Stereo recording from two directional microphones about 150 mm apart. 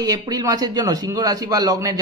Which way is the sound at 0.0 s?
25° right (ahead or behind).